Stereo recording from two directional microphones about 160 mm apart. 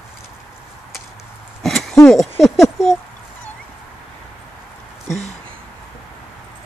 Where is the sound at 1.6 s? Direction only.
Centre (ahead or behind).